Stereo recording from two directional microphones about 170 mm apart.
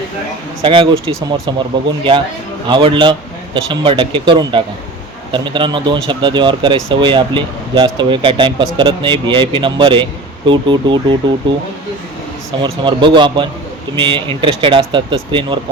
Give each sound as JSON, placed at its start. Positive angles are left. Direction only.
{"t": 0.6, "sound": "speech", "side_deg": -30}
{"t": 2.6, "sound": "speech", "side_deg": -30}
{"t": 12.6, "sound": "speech", "side_deg": -30}